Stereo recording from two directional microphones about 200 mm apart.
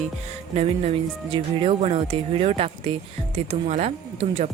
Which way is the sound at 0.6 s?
30° right (ahead or behind).